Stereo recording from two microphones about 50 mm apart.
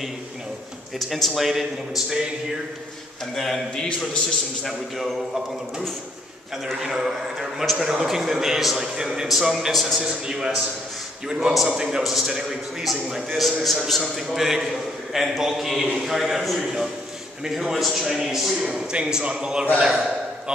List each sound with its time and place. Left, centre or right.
0.9 s a man's voice: centre
3.3 s a man's voice: centre
4.6 s a man's voice: centre
10.0 s a man's voice: centre
18.7 s a man's voice: right